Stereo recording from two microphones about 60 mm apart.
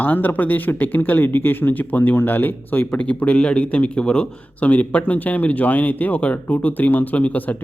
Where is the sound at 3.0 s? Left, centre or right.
Left.